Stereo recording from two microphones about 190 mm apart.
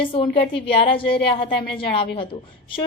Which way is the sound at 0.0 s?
25° left (ahead or behind).